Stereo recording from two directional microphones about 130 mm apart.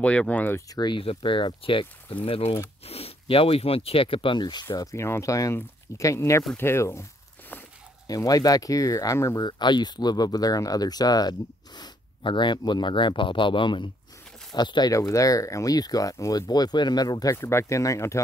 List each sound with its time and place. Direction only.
0.0 s speech: 10° left (ahead or behind)
0.7 s speech: 35° left (ahead or behind); by 7.6 s 15° left (ahead or behind)
8.1 s speech: 30° left (ahead or behind)
9.5 s speech: 35° left (ahead or behind)